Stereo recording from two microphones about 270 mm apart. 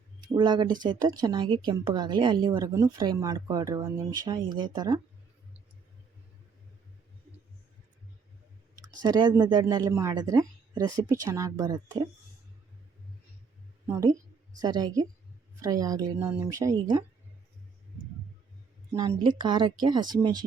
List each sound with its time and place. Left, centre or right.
0.2 s a woman's voice: centre
9.0 s a woman's voice: centre
13.8 s a woman's voice: centre
18.9 s a woman's voice: centre